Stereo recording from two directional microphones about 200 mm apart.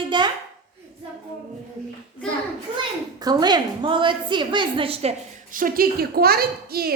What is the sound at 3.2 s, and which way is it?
A woman's voice, 20° right (ahead or behind).